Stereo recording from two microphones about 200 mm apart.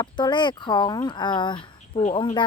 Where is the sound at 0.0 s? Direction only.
20° left (ahead or behind).